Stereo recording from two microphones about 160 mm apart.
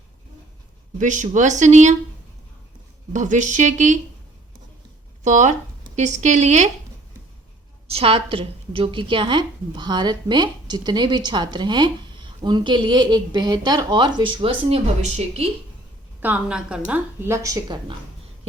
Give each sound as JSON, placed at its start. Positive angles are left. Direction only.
{"t": 0.9, "sound": "speech", "side_deg": -50}
{"t": 3.1, "sound": "speech", "side_deg": -50}
{"t": 5.2, "sound": "speech", "side_deg": -45}
{"t": 7.9, "sound": "a woman's voice", "side_deg": -35}
{"t": 16.2, "sound": "a woman's voice", "side_deg": -5}